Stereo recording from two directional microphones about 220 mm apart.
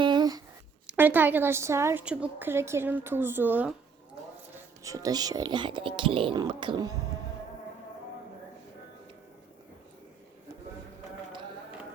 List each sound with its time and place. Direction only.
0.0 s a sound: 20° right (ahead or behind)
0.9 s a woman's voice: 10° right (ahead or behind)
4.8 s speech: 15° right (ahead or behind)